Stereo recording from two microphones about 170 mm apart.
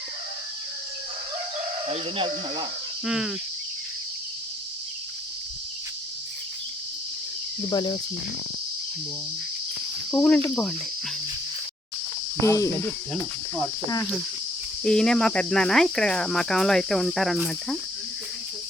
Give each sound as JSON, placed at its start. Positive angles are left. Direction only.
{"t": 1.9, "sound": "speech", "side_deg": -30}
{"t": 3.0, "sound": "cricket", "side_deg": -5}
{"t": 7.7, "sound": "speech", "side_deg": 25}
{"t": 10.2, "sound": "speech", "side_deg": 10}
{"t": 12.4, "sound": "speech", "side_deg": 20}
{"t": 14.8, "sound": "cricket", "side_deg": 5}